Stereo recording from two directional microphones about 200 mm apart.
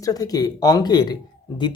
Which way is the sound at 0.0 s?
20° left (ahead or behind).